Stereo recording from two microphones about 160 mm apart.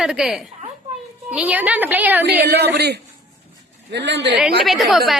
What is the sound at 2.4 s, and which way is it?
A woman's voice, 90° right.